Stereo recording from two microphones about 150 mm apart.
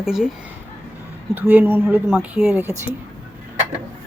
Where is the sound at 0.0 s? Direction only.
5° right (ahead or behind).